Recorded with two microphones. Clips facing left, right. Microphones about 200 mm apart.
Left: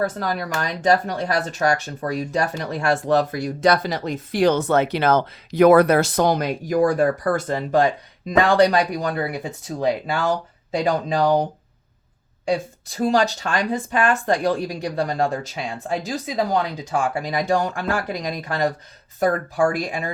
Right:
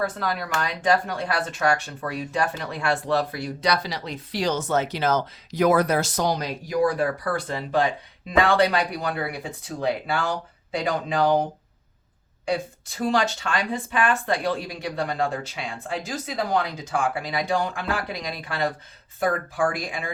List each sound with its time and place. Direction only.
0.0 s speech: 40° left (ahead or behind)
12.9 s speech: 40° left (ahead or behind)